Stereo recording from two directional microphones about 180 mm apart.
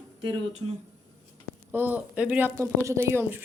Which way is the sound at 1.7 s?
10° right (ahead or behind).